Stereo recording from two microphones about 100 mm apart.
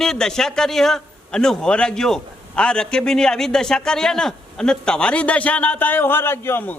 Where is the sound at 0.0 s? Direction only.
5° left (ahead or behind); by 6.7 s 20° left (ahead or behind).